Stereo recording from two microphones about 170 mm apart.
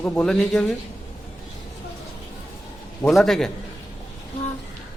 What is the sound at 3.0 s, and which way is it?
Speech, centre (ahead or behind).